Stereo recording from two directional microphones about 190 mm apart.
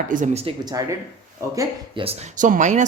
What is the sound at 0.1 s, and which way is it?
Speech, 45° right (ahead or behind).